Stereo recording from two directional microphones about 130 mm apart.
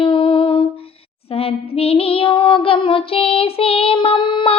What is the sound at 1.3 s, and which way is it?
Child singing, 50° left (ahead or behind).